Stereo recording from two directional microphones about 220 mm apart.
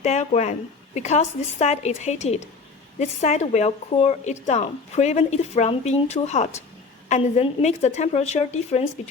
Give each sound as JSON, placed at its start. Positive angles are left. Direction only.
{"t": 0.0, "sound": "speech", "side_deg": 30}